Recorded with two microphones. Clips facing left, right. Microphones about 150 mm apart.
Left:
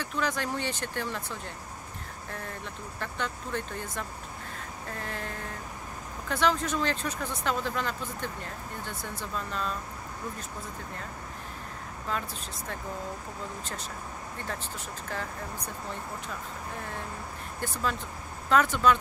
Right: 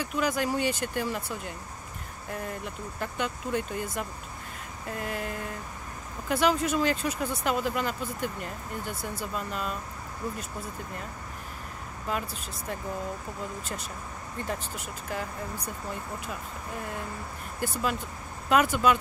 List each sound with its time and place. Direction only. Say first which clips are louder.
0.0 s speech: right 3 dB; 10° right (ahead or behind)
5.0 s speech: right 5 dB; 10° right (ahead or behind)
12.1 s speech: right 2 dB; 10° right (ahead or behind)
17.6 s speech: right 2 dB; 10° right (ahead or behind)